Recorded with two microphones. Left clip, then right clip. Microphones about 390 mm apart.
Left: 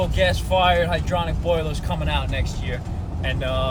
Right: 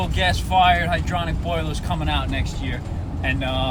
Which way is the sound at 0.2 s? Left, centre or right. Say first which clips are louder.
Right 2 dB; centre.